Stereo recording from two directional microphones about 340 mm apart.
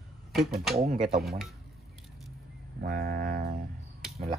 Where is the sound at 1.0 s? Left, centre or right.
Centre.